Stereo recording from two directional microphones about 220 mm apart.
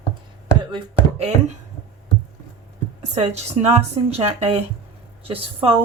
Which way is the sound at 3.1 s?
30° right (ahead or behind).